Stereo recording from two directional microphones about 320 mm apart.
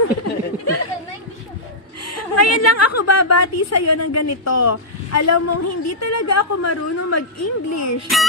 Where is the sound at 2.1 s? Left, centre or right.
Left.